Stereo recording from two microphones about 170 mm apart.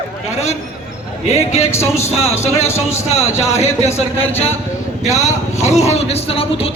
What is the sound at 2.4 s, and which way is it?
A man's voice, 15° left (ahead or behind).